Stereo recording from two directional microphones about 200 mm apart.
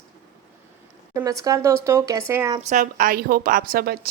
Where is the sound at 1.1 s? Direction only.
15° right (ahead or behind).